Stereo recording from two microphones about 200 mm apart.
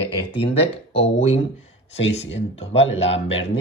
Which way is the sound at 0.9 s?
30° left (ahead or behind).